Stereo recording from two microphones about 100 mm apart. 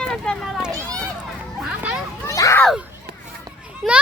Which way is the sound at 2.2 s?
30° left (ahead or behind).